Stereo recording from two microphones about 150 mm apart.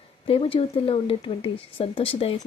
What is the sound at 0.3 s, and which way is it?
Speech, 40° left (ahead or behind).